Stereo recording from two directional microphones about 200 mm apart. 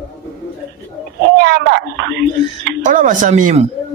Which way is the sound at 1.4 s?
60° right (ahead or behind).